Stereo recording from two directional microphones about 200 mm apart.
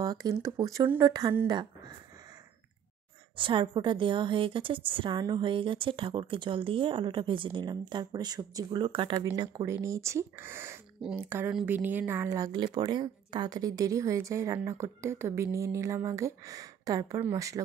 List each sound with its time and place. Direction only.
0.0 s speech: 20° right (ahead or behind)
3.3 s a woman's voice: 25° right (ahead or behind)